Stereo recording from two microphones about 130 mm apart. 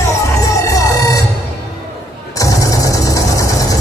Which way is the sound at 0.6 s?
25° left (ahead or behind).